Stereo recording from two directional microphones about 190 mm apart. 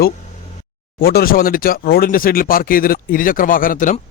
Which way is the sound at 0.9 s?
50° left (ahead or behind).